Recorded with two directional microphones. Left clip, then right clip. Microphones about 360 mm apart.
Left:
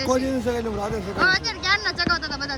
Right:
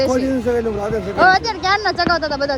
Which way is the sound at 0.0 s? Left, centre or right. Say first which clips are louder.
Right 5 dB; centre.